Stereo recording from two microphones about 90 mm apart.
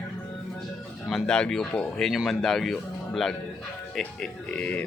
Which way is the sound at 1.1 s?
5° left (ahead or behind).